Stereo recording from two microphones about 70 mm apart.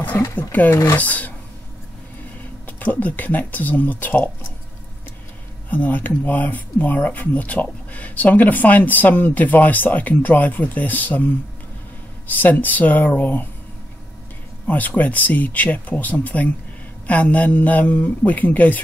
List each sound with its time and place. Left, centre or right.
0.4 s speech: left
2.6 s speech: left
5.7 s speech: left
14.7 s speech: left